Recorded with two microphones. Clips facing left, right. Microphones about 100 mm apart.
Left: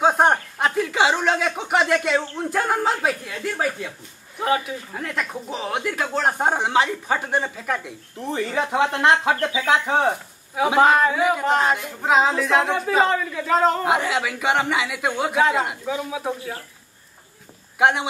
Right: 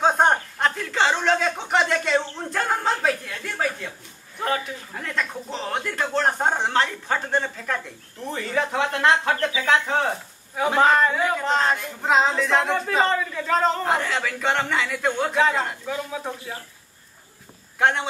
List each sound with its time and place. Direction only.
0.0 s a sound: 10° left (ahead or behind)
4.4 s speech: 10° left (ahead or behind)
17.7 s a man's voice: 15° left (ahead or behind)